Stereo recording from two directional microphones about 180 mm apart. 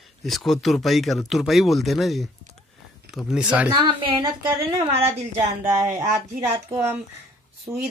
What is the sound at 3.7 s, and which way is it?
A woman's voice, 25° right (ahead or behind).